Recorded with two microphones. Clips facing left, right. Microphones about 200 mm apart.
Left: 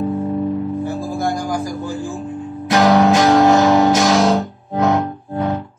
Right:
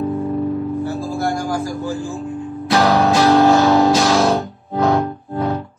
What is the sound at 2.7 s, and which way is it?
Music, 15° left (ahead or behind).